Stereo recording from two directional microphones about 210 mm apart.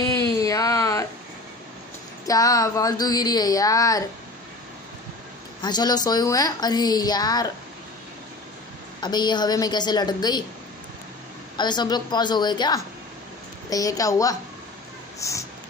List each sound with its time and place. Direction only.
0.1 s a sound: 15° left (ahead or behind)
2.2 s speech: 15° left (ahead or behind)
5.6 s a woman's voice: 20° left (ahead or behind)
9.0 s a woman's voice: 20° left (ahead or behind)
11.5 s a woman's voice: 20° left (ahead or behind)